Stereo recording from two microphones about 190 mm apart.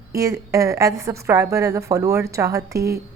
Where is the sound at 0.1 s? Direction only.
15° right (ahead or behind).